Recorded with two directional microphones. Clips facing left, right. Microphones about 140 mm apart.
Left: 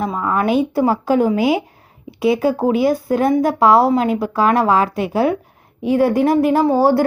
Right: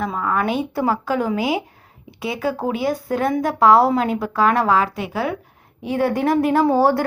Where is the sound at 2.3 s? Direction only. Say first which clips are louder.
Left 5 dB; 35° left (ahead or behind).